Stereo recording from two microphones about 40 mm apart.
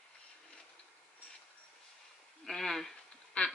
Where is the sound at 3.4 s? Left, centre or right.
Left.